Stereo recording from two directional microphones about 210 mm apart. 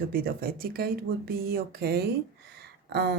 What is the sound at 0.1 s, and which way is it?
Speech, 45° right (ahead or behind).